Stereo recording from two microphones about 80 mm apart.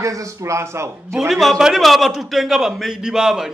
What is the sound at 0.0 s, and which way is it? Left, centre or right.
Speech, right.